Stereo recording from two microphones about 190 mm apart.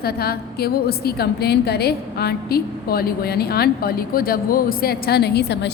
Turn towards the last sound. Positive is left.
turn(degrees=60)  # may be behind; listen again after turning